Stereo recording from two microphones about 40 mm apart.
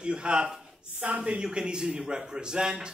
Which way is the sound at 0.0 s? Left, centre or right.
Right.